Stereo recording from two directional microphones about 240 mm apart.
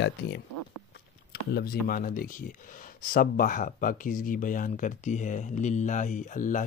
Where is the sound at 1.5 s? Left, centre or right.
Left.